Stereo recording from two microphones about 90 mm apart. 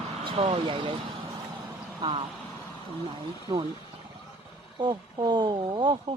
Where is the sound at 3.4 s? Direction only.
60° right (ahead or behind).